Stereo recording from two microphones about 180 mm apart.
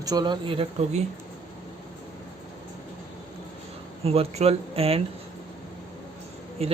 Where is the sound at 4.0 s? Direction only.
35° right (ahead or behind).